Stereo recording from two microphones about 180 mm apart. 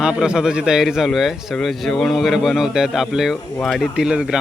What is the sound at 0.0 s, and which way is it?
Speech, 5° right (ahead or behind).